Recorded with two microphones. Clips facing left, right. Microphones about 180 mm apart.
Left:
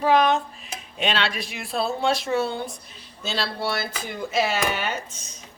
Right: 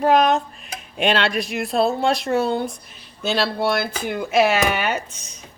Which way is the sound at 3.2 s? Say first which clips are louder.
Right 7 dB; 60° right (ahead or behind).